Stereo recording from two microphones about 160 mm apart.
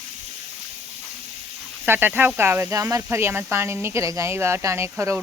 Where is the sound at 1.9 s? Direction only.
10° right (ahead or behind).